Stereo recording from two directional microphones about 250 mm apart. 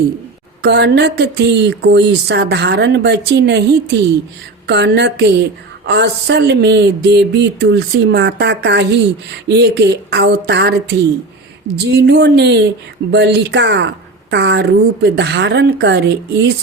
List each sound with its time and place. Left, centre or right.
0.6 s a woman's voice: right